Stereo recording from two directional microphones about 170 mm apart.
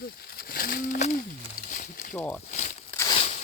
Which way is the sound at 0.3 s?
60° left (ahead or behind).